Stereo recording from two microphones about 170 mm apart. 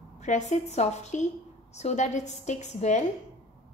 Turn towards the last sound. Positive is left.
turn(degrees=40)  # may be behind; listen again after turning